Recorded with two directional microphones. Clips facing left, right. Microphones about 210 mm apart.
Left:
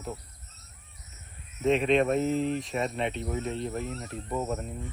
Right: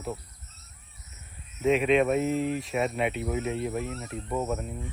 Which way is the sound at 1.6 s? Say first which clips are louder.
Right 1 dB; centre (ahead or behind).